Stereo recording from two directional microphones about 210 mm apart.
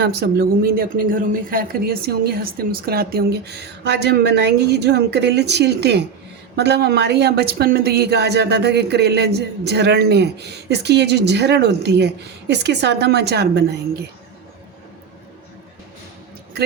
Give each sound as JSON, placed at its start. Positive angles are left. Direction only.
{"t": 0.0, "sound": "speech", "side_deg": -50}